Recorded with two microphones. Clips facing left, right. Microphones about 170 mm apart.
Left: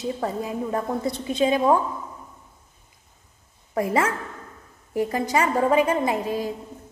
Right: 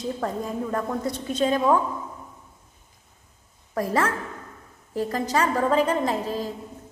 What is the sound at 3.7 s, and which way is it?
A woman's voice, 15° left (ahead or behind).